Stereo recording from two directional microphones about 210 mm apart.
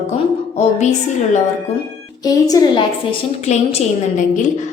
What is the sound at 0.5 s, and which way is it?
Speech, 35° left (ahead or behind).